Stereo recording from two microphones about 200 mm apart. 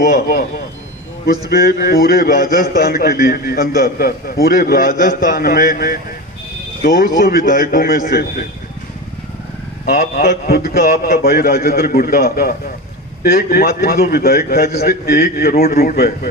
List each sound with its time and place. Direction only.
0.0 s a man's voice: 45° left (ahead or behind)
1.5 s a man's voice: 50° left (ahead or behind)
9.8 s a man's voice: 50° left (ahead or behind)